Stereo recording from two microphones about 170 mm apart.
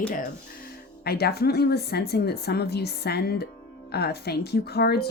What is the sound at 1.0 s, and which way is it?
Speech, 70° left (ahead or behind).